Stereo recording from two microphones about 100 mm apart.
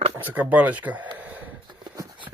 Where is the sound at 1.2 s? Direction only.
15° right (ahead or behind).